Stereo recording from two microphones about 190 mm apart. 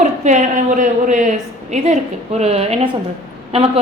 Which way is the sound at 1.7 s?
35° right (ahead or behind).